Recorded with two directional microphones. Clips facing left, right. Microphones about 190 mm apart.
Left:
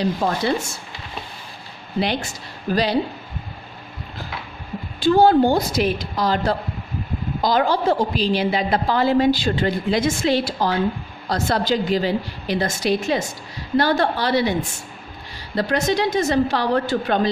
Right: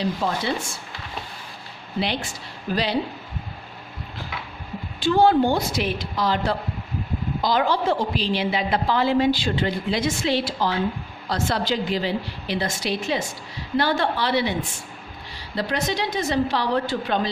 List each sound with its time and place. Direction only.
0.0 s a woman's voice: 45° left (ahead or behind)
2.0 s a woman's voice: 45° left (ahead or behind)
5.0 s a woman's voice: 40° left (ahead or behind)